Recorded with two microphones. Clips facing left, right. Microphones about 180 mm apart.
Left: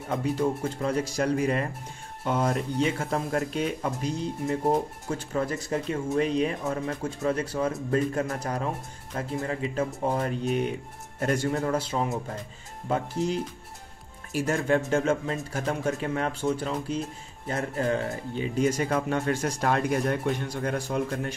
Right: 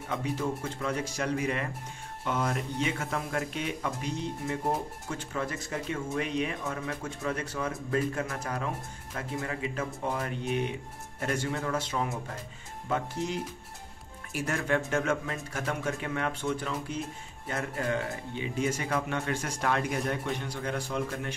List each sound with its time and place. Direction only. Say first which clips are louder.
0.1 s speech: left 5 dB; 40° left (ahead or behind)